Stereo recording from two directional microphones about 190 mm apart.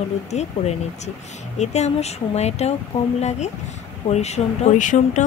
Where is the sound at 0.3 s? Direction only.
35° left (ahead or behind).